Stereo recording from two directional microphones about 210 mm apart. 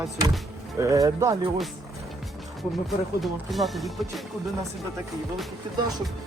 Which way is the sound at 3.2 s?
Centre (ahead or behind).